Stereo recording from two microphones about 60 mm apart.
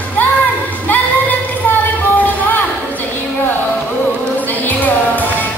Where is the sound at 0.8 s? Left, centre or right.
Left.